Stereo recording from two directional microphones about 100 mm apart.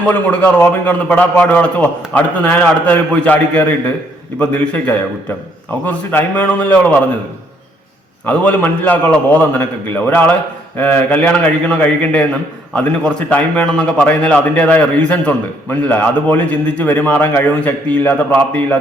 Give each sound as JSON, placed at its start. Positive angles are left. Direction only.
{"t": 0.1, "sound": "a man's voice", "side_deg": 15}
{"t": 8.3, "sound": "a man's voice", "side_deg": 15}